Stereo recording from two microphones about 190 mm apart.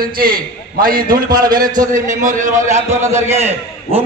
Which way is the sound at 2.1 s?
45° right (ahead or behind).